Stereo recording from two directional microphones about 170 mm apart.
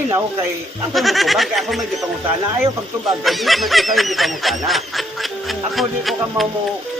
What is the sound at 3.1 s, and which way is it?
Speech, centre (ahead or behind).